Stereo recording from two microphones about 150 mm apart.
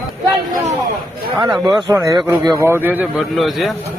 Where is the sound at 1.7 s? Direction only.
20° right (ahead or behind).